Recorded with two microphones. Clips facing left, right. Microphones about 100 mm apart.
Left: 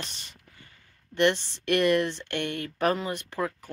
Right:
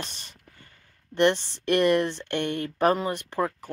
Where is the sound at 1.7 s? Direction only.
20° right (ahead or behind).